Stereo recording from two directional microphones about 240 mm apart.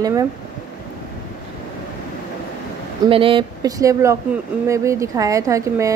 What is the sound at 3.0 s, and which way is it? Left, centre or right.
Speech, right.